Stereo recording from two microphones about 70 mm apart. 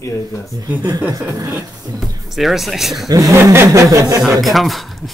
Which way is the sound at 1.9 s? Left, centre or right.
Right.